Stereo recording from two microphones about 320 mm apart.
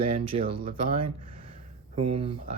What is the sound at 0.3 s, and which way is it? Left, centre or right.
Speech, centre.